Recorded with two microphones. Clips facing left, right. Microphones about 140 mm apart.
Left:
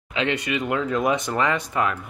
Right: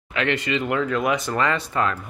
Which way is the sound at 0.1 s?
15° left (ahead or behind).